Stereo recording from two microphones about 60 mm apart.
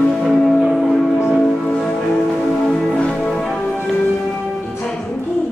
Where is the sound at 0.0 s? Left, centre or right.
Centre.